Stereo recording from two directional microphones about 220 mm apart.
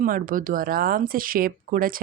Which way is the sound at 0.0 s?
40° right (ahead or behind).